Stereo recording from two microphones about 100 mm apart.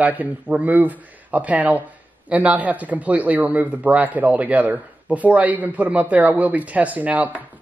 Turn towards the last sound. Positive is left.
turn(degrees=-15)  # may be behind; listen again after turning